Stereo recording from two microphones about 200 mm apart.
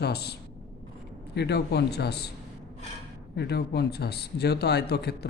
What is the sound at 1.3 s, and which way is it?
Speech, 55° left (ahead or behind).